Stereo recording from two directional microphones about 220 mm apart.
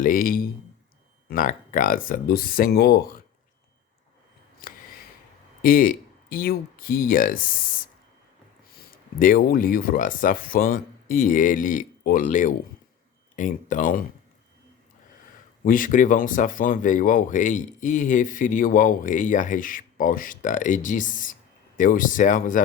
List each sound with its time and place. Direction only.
0.0 s speech: 40° left (ahead or behind)
4.6 s a sound: 40° left (ahead or behind)
5.6 s speech: 40° left (ahead or behind)
9.1 s speech: 40° left (ahead or behind)
15.6 s speech: 40° left (ahead or behind)